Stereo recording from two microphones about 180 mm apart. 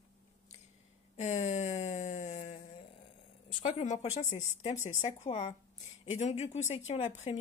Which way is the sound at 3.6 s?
40° left (ahead or behind).